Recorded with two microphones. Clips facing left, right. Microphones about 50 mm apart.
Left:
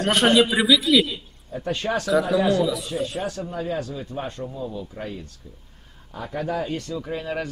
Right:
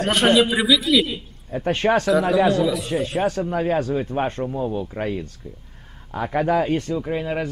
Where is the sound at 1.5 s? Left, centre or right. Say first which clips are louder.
Right 6 dB; right.